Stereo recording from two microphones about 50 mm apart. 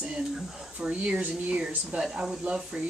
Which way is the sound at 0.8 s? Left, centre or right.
Right.